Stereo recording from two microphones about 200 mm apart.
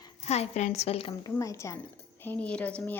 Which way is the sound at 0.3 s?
35° left (ahead or behind).